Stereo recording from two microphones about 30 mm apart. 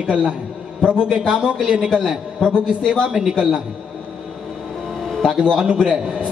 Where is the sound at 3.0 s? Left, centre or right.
Right.